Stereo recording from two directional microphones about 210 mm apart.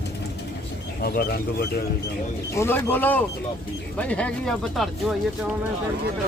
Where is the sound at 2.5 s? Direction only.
10° left (ahead or behind).